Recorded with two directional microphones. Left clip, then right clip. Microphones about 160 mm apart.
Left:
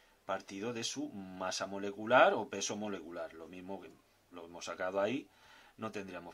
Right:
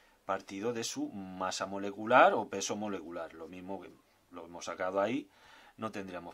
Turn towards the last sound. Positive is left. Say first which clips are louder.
# right 3 dB
turn(degrees=-25)  # may be behind; listen again after turning